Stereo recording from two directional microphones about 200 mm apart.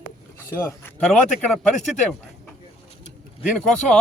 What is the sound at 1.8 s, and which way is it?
Speech, 35° left (ahead or behind).